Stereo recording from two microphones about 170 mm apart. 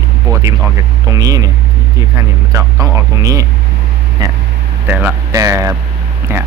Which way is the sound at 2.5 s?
20° right (ahead or behind).